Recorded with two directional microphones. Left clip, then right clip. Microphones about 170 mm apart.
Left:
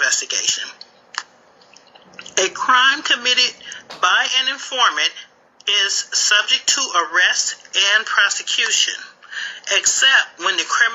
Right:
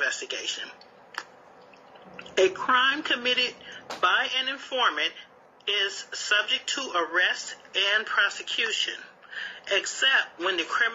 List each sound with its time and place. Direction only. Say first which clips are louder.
0.0 s speech: left 10 dB; 35° left (ahead or behind)
2.3 s a woman's voice: left 7 dB; 35° left (ahead or behind)